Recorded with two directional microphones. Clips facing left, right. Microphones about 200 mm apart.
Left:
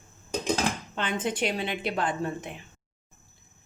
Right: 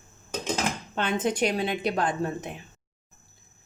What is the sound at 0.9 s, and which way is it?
A woman's voice, 45° right (ahead or behind).